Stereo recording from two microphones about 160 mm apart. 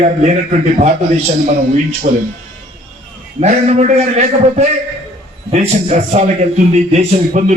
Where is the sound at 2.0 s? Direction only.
45° right (ahead or behind).